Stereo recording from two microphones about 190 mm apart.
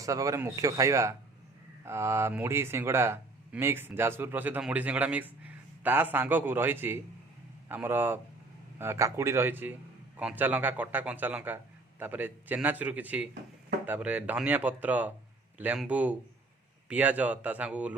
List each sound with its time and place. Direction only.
0.0 s speech: 15° right (ahead or behind)